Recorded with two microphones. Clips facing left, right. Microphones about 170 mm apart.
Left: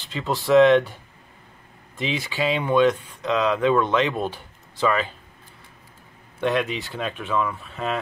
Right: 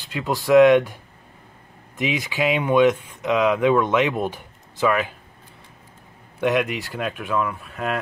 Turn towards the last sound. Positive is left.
turn(degrees=-5)  # may be behind; listen again after turning